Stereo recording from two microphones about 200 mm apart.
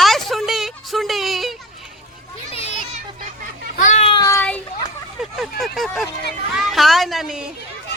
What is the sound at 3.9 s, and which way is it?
Child singing, 30° left (ahead or behind).